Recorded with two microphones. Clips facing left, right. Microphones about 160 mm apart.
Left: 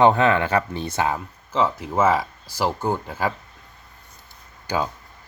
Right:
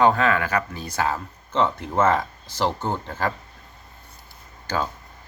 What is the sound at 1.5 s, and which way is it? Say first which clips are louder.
Speech: even; 5° left (ahead or behind).